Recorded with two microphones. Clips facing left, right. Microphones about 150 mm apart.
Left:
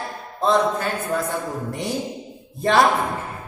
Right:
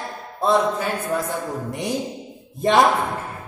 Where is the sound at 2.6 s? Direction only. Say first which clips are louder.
Right 1 dB; 20° right (ahead or behind).